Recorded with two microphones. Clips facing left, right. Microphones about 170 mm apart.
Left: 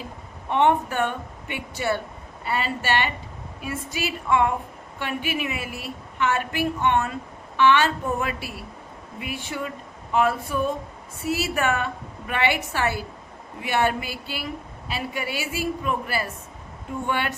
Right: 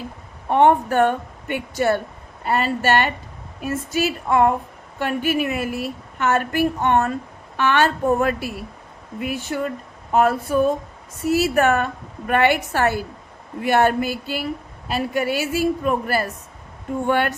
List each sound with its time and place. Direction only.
0.4 s a woman's voice: 45° right (ahead or behind)